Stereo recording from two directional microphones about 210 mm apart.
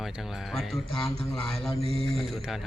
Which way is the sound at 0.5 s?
Centre (ahead or behind).